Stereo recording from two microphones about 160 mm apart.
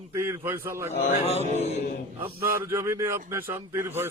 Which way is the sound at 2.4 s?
15° right (ahead or behind).